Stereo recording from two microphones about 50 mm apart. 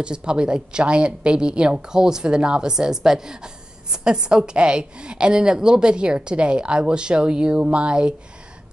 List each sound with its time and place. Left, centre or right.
0.0 s a woman's voice: centre